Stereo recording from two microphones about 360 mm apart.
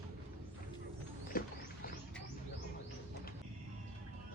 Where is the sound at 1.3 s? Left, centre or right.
Left.